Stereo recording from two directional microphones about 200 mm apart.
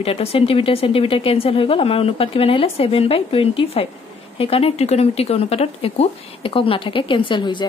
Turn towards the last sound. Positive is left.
turn(degrees=25)  # may be behind; listen again after turning